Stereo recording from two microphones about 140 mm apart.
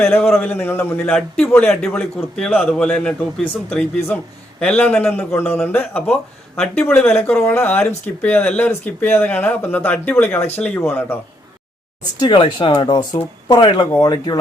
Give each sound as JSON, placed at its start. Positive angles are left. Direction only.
{"t": 0.0, "sound": "speech", "side_deg": 5}
{"t": 12.2, "sound": "speech", "side_deg": 35}